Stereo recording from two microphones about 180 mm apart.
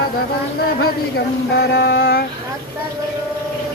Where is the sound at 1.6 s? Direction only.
60° left (ahead or behind).